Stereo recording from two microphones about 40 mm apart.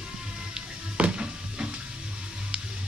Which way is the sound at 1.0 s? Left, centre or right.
Right.